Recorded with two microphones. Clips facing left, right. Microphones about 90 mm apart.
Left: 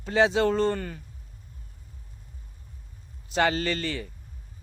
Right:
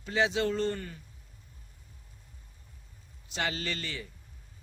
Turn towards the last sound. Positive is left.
turn(degrees=50)  # may be behind; listen again after turning